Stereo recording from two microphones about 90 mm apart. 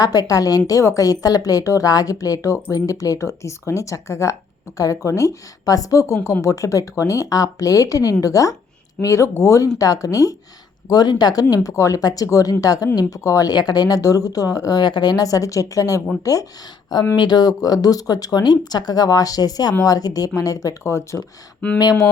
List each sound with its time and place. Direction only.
0.0 s speech: 45° left (ahead or behind)
17.2 s speech: 55° left (ahead or behind); by 21.2 s 35° left (ahead or behind)
21.8 s speech: 45° left (ahead or behind)